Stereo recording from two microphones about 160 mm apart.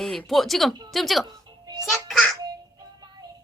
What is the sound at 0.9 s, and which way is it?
Speech, centre (ahead or behind).